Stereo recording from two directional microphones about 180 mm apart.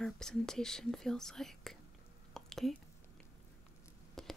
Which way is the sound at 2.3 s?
Centre (ahead or behind).